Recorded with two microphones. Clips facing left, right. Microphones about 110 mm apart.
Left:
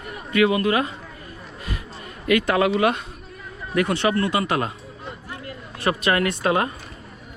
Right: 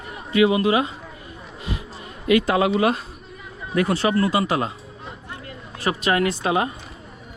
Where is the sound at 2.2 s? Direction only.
30° right (ahead or behind).